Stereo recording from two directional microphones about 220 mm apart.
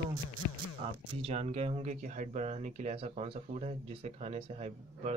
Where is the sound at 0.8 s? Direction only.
25° right (ahead or behind).